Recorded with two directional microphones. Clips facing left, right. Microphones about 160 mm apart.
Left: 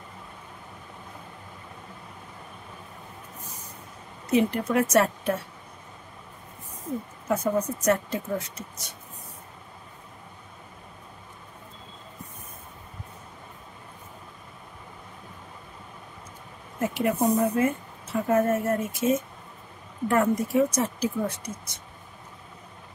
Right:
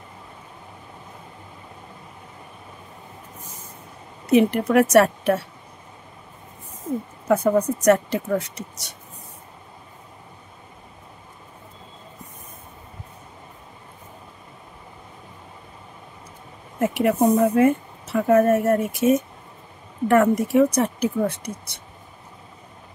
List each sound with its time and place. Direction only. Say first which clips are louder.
4.3 s speech: right 6 dB; 70° right (ahead or behind)
7.2 s speech: right 7 dB; 70° right (ahead or behind)
16.8 s speech: right 5 dB; 70° right (ahead or behind)